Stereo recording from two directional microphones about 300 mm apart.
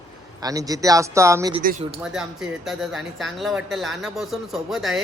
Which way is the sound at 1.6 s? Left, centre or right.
Right.